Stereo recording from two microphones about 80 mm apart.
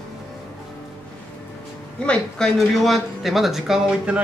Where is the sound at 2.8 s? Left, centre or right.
Centre.